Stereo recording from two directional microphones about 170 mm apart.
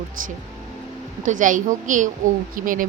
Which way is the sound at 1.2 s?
50° right (ahead or behind).